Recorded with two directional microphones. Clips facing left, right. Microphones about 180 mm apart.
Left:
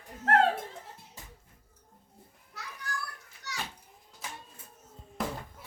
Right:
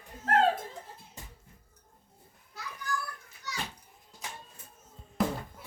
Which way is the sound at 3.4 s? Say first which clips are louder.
Right 2 dB; 75° left (ahead or behind).